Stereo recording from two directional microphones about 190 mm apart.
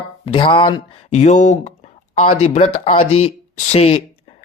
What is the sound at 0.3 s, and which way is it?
Speech, 25° left (ahead or behind).